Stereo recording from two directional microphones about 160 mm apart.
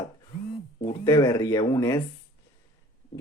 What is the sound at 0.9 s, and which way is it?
Speech, 20° left (ahead or behind).